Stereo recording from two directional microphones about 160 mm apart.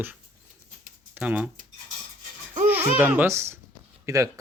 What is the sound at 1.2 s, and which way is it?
Speech, 10° right (ahead or behind).